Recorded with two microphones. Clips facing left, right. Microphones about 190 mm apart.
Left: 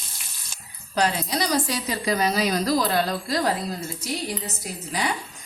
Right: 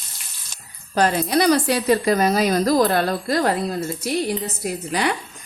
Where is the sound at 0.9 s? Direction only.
50° right (ahead or behind).